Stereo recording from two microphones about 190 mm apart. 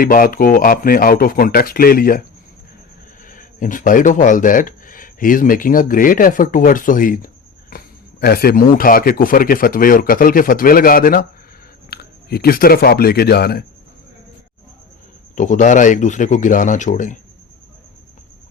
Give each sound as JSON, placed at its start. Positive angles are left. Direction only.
{"t": 0.0, "sound": "speech", "side_deg": 45}
{"t": 3.2, "sound": "speech", "side_deg": 45}
{"t": 7.7, "sound": "a sound", "side_deg": 50}
{"t": 8.2, "sound": "speech", "side_deg": 55}
{"t": 15.4, "sound": "speech", "side_deg": 40}